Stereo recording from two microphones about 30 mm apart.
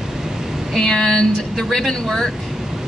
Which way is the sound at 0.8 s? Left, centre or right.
Left.